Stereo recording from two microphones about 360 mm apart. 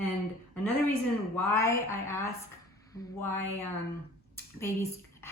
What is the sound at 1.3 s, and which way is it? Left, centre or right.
A woman's voice, centre.